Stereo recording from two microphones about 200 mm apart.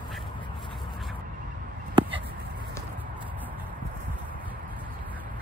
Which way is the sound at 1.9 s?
25° right (ahead or behind).